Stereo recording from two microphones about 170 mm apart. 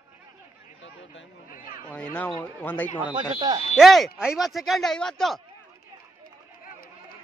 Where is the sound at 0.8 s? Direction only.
90° left.